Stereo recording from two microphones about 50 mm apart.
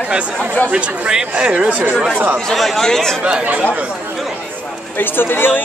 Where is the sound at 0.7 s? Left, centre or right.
Right.